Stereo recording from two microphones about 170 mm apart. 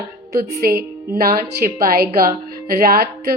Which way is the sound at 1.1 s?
60° right (ahead or behind).